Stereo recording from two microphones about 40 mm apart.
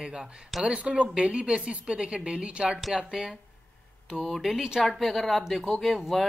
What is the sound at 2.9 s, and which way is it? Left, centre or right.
Speech, centre.